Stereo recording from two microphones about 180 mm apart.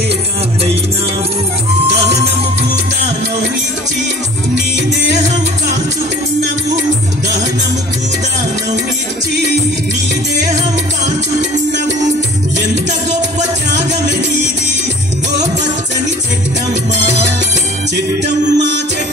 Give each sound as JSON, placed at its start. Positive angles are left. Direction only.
{"t": 1.9, "sound": "music", "side_deg": -35}
{"t": 18.2, "sound": "music", "side_deg": -75}